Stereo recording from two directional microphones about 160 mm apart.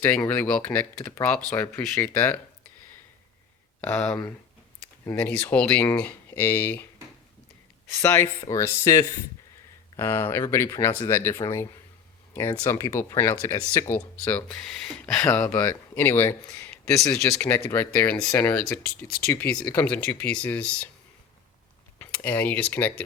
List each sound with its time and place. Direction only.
0.3 s speech: 10° left (ahead or behind)
3.8 s speech: 10° left (ahead or behind)
8.0 s speech: 15° left (ahead or behind)
21.9 s speech: 10° left (ahead or behind)